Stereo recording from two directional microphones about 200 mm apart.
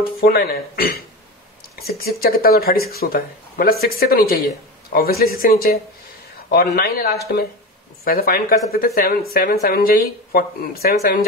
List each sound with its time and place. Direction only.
0.0 s speech: 50° left (ahead or behind)